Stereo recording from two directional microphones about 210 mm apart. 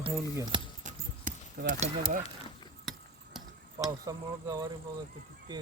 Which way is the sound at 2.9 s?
Centre (ahead or behind).